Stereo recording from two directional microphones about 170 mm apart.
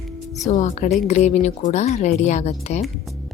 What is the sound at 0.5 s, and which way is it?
A woman's voice, 45° left (ahead or behind).